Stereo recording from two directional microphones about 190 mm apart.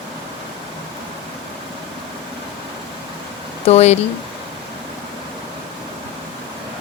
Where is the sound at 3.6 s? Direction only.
35° left (ahead or behind).